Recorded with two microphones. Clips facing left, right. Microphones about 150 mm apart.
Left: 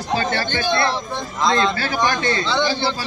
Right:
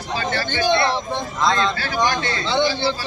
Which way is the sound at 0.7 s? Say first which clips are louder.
Right 2 dB; 20° right (ahead or behind).